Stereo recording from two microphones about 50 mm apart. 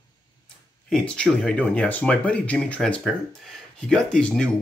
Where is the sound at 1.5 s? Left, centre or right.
Left.